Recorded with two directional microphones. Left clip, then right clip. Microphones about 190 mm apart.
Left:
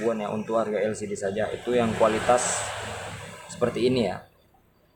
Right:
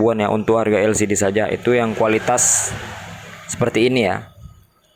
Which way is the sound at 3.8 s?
35° right (ahead or behind).